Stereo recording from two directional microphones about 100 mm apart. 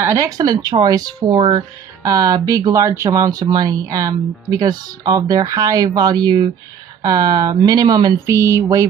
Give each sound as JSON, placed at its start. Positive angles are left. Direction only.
{"t": 0.0, "sound": "speech", "side_deg": -30}
{"t": 2.0, "sound": "speech", "side_deg": -40}
{"t": 8.3, "sound": "speech", "side_deg": -30}